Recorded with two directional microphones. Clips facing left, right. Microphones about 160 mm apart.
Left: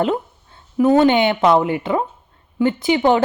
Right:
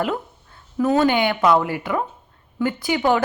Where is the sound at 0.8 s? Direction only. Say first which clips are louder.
Left 4 dB; 25° left (ahead or behind).